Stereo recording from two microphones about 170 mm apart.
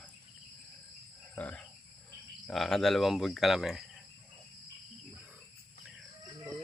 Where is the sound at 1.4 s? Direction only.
10° left (ahead or behind).